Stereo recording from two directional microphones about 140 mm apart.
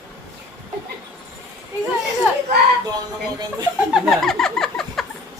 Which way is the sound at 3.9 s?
Centre (ahead or behind).